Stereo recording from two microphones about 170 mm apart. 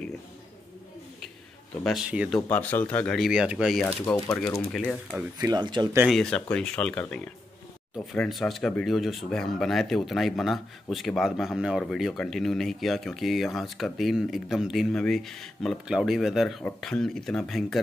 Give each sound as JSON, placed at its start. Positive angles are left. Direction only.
{"t": 1.8, "sound": "speech", "side_deg": 0}
{"t": 2.3, "sound": "speech", "side_deg": 10}
{"t": 5.5, "sound": "speech", "side_deg": -25}
{"t": 6.0, "sound": "speech", "side_deg": 5}